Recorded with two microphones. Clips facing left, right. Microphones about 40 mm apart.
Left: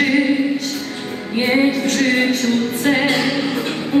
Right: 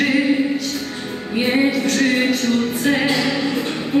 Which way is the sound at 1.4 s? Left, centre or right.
Left.